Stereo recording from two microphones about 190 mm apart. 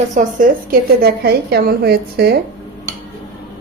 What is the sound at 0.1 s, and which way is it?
A woman's voice, 45° right (ahead or behind).